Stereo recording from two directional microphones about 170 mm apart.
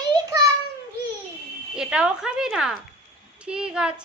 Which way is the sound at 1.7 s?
5° right (ahead or behind).